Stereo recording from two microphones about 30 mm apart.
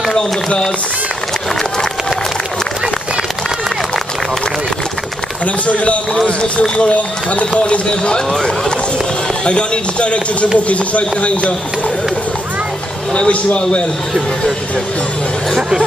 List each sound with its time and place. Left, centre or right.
5.4 s a man's voice: left
9.4 s a man's voice: left
13.3 s speech: left